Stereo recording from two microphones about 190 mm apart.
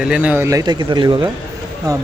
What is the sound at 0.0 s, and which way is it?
Speech, 5° right (ahead or behind).